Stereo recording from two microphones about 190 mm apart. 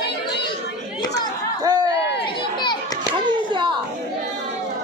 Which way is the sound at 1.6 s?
20° right (ahead or behind).